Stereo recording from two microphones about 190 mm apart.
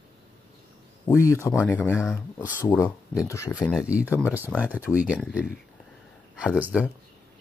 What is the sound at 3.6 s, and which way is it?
Speech, 5° right (ahead or behind).